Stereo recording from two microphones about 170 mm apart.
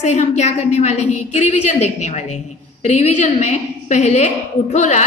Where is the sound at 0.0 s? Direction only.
45° left (ahead or behind).